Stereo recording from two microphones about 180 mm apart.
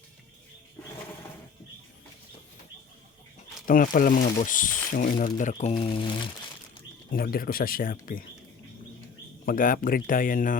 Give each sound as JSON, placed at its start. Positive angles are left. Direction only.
{"t": 3.7, "sound": "speech", "side_deg": 50}
{"t": 5.7, "sound": "speech", "side_deg": 30}
{"t": 7.1, "sound": "speech", "side_deg": 55}
{"t": 9.5, "sound": "speech", "side_deg": 50}